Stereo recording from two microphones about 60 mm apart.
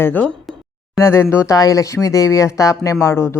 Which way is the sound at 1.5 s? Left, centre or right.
Left.